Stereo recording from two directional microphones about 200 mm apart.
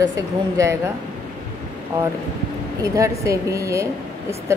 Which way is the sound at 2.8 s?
15° right (ahead or behind).